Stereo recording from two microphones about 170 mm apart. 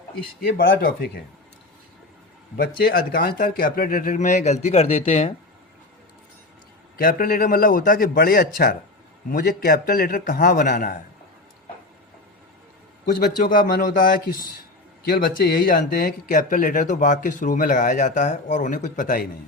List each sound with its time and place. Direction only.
0.4 s speech: 60° left (ahead or behind)
2.6 s speech: 60° left (ahead or behind); by 5.3 s 35° left (ahead or behind)
7.0 s speech: 55° left (ahead or behind)
13.1 s speech: 60° left (ahead or behind)